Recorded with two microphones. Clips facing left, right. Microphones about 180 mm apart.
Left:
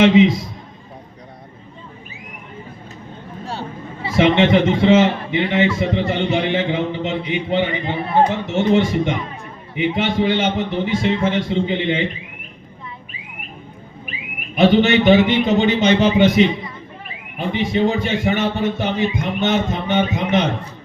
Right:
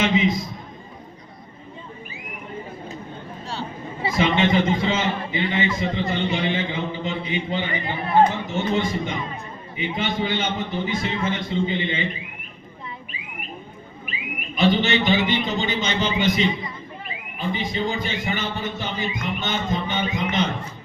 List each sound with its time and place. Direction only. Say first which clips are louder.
0.0 s a sound: left 8 dB; 80° left
4.2 s a man's voice: left 6 dB; 70° left (ahead or behind)
14.5 s a man's voice: left 6 dB; 65° left (ahead or behind)